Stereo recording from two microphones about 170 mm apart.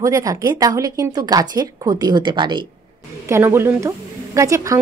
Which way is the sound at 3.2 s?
15° right (ahead or behind).